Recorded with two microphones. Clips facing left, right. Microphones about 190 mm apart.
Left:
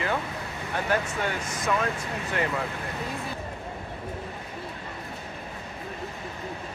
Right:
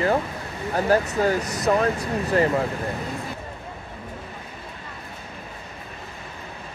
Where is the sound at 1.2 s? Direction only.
40° right (ahead or behind).